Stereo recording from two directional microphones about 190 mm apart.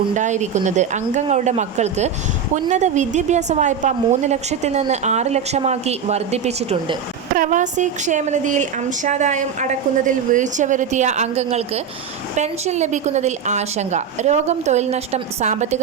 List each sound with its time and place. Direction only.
0.1 s a woman's voice: 40° right (ahead or behind)